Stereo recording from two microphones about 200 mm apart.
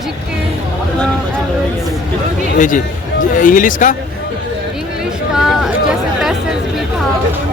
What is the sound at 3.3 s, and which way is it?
Speech, 40° left (ahead or behind).